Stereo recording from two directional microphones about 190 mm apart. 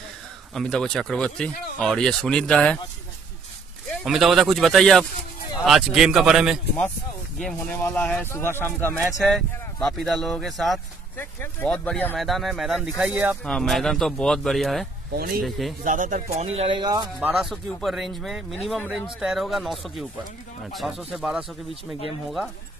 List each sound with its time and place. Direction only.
0.6 s speech: 5° left (ahead or behind)
4.0 s speech: centre (ahead or behind)
9.2 s speech: centre (ahead or behind)
13.4 s speech: 5° left (ahead or behind)
15.1 s speech: 50° right (ahead or behind); by 17.1 s 20° right (ahead or behind)
17.2 s speech: centre (ahead or behind)